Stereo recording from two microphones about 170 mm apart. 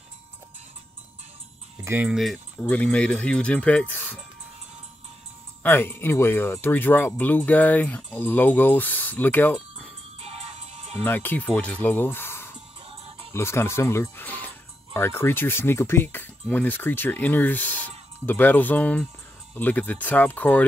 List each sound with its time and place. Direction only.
1.9 s speech: 10° right (ahead or behind); by 4.2 s 10° left (ahead or behind)
5.6 s speech: 10° left (ahead or behind)
10.2 s music: 40° right (ahead or behind)
11.1 s speech: 10° left (ahead or behind)